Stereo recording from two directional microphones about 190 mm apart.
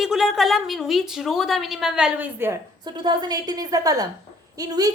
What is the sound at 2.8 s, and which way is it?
A woman's voice, 25° right (ahead or behind).